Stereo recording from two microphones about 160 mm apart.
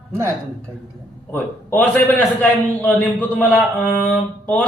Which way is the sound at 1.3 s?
10° left (ahead or behind).